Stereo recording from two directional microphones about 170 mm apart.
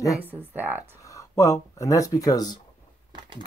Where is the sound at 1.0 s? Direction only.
20° left (ahead or behind).